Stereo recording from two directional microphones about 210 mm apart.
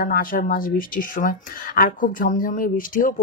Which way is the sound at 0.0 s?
40° left (ahead or behind).